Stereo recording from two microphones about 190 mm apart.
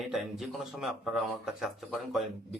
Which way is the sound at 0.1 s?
Centre (ahead or behind).